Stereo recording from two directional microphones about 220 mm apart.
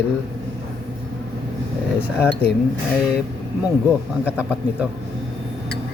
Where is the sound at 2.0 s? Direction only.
5° right (ahead or behind).